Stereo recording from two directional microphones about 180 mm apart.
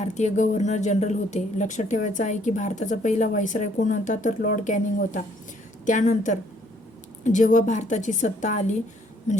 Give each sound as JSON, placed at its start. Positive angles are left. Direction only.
{"t": 0.0, "sound": "speech", "side_deg": 40}